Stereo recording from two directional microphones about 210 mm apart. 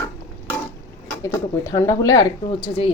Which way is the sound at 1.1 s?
15° left (ahead or behind).